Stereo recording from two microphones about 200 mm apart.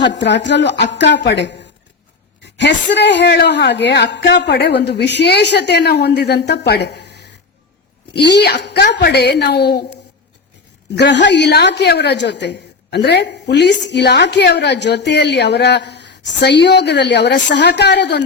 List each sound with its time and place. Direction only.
0.0 s a woman's voice: 60° left (ahead or behind)
2.6 s a woman's voice: 60° left (ahead or behind)
10.9 s a woman's voice: 60° left (ahead or behind)